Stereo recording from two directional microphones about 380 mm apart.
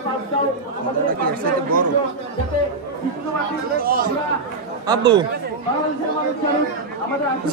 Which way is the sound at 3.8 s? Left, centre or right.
Right.